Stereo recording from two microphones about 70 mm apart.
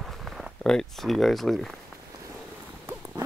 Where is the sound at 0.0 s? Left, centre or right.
Centre.